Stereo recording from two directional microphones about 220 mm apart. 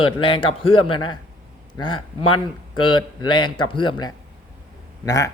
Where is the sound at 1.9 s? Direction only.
80° left.